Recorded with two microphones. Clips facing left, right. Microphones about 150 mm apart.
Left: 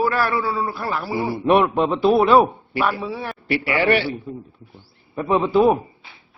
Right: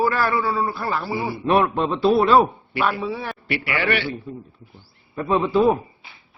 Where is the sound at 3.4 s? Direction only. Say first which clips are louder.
Left 5 dB; 35° left (ahead or behind).